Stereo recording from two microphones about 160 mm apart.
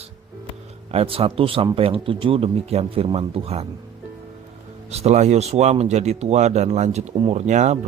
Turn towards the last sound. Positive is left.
turn(degrees=-45)  # may be behind; listen again after turning